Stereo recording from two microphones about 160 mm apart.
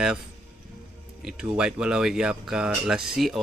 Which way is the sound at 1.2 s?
5° right (ahead or behind).